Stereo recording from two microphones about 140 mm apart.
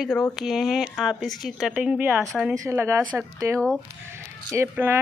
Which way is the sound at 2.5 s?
20° right (ahead or behind).